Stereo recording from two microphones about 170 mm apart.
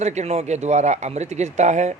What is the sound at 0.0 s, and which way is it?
Speech, 40° right (ahead or behind).